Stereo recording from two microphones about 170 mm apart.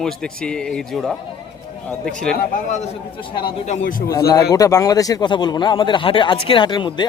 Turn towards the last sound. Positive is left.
turn(degrees=30)  # may be behind; listen again after turning